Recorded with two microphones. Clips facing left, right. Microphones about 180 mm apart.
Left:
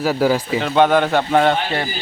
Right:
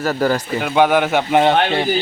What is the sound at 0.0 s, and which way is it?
Speech, 5° left (ahead or behind).